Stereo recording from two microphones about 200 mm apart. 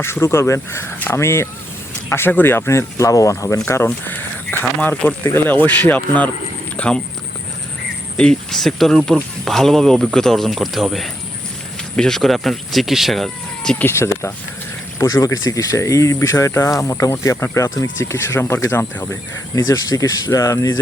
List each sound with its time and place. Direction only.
0.0 s speech: 15° left (ahead or behind)
8.1 s speech: 5° left (ahead or behind)